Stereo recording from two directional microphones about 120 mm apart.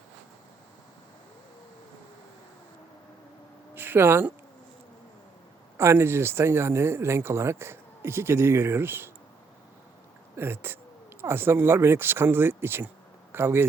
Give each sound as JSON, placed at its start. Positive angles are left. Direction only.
{"t": 3.8, "sound": "speech", "side_deg": -15}
{"t": 5.7, "sound": "speech", "side_deg": -25}
{"t": 10.3, "sound": "speech", "side_deg": -20}